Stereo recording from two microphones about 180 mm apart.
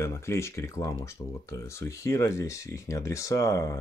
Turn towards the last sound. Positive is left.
turn(degrees=15)  # may be behind; listen again after turning